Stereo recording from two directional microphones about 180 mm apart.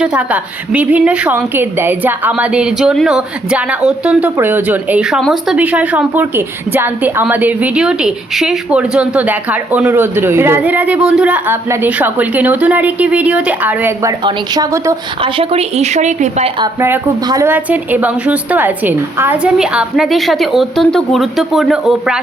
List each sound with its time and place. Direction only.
0.0 s a woman's voice: 5° right (ahead or behind)
14.3 s a woman's voice: 20° right (ahead or behind)
15.2 s a woman's voice: 30° right (ahead or behind)
16.8 s a woman's voice: 15° right (ahead or behind)